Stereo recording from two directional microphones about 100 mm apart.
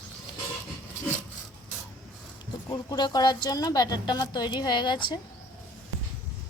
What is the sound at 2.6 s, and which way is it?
Speech, 40° left (ahead or behind).